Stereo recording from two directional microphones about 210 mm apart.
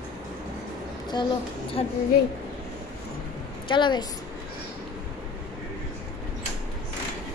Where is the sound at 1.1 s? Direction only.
20° left (ahead or behind).